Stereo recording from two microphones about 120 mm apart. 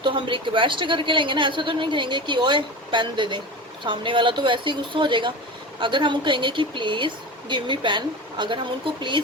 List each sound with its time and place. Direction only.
0.0 s a woman's voice: 45° right (ahead or behind)